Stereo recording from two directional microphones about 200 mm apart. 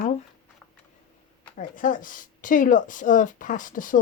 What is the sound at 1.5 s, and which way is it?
Speech, 40° left (ahead or behind).